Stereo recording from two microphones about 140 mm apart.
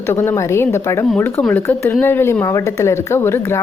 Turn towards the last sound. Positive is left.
turn(degrees=15)  # may be behind; listen again after turning